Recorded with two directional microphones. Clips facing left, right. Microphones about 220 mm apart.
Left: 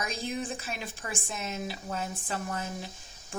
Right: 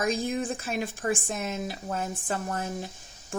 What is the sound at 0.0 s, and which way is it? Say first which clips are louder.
Speech: right 6 dB; 50° right (ahead or behind).